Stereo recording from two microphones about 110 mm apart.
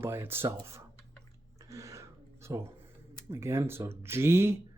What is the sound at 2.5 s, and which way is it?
Speech, 30° right (ahead or behind).